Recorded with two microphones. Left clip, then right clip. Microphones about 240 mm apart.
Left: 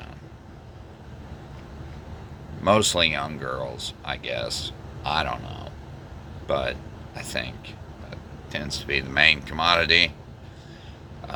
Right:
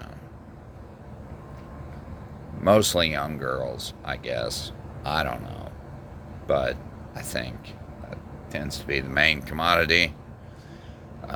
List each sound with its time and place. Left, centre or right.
2.6 s a man's voice: right
6.5 s speech: right